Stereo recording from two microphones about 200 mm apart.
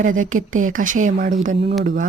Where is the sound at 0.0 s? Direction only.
40° right (ahead or behind).